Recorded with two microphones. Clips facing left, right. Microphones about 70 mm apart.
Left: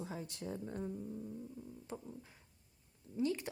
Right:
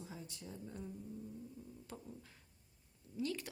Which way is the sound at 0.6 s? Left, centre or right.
Left.